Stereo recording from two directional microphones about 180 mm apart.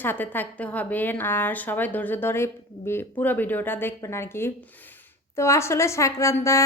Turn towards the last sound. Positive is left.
turn(degrees=15)  # may be behind; listen again after turning